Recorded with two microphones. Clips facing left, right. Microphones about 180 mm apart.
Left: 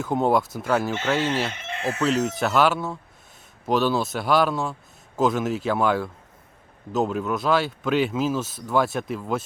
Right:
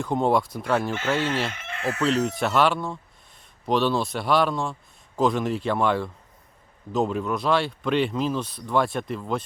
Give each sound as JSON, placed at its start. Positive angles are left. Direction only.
{"t": 0.0, "sound": "speech", "side_deg": 5}
{"t": 1.7, "sound": "chicken", "side_deg": 20}
{"t": 2.0, "sound": "speech", "side_deg": 0}